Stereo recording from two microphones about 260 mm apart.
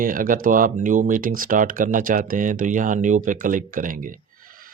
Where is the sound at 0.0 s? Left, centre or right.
Right.